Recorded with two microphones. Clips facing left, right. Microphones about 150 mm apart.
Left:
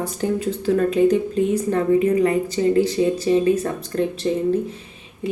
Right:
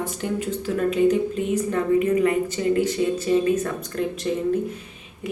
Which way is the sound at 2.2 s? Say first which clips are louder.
Left 3 dB; 30° left (ahead or behind).